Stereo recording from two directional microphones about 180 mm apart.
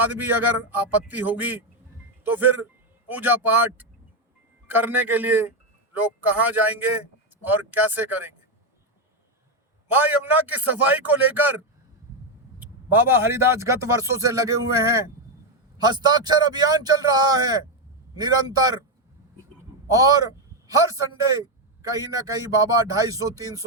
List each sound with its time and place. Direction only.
0.0 s a man's voice: 10° right (ahead or behind)
9.9 s a man's voice: 10° right (ahead or behind)
19.9 s a man's voice: 20° right (ahead or behind)